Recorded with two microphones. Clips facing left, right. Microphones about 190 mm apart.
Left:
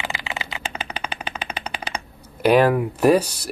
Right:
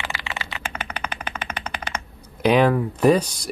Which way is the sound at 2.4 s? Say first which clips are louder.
Left 1 dB; 5° left (ahead or behind).